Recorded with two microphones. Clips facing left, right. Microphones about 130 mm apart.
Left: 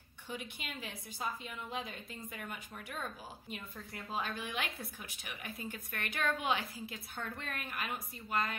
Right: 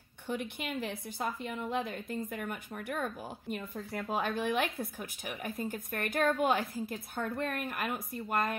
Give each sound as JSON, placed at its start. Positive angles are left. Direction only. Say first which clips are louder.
{"t": 0.3, "sound": "a woman's voice", "louder": "right 8 dB", "side_deg": -55}